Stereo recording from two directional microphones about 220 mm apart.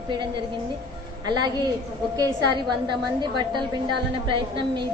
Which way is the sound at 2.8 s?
20° right (ahead or behind).